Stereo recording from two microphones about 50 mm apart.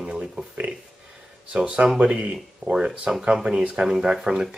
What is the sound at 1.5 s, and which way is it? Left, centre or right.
Speech, right.